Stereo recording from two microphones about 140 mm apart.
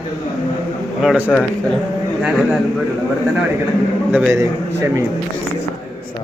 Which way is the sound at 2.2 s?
Centre (ahead or behind).